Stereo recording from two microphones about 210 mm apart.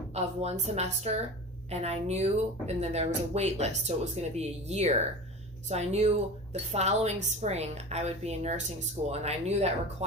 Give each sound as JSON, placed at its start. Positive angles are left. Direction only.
{"t": 0.1, "sound": "a woman's voice", "side_deg": -30}